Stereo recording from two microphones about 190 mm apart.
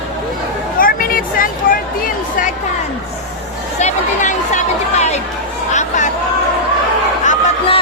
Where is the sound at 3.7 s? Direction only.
40° left (ahead or behind).